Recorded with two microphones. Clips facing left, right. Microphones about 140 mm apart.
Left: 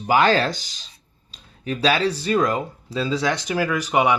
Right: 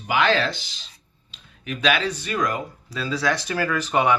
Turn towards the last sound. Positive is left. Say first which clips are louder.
# left 1 dB
turn(degrees=15)  # may be behind; listen again after turning